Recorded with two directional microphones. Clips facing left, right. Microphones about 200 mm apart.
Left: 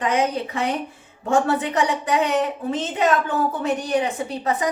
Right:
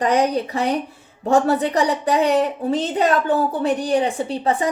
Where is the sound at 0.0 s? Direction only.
35° right (ahead or behind).